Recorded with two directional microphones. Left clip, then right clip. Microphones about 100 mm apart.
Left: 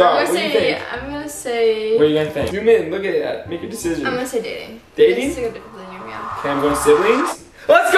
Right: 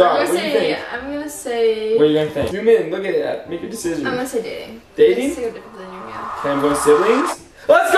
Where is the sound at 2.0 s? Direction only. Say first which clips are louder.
Even; 5° left (ahead or behind).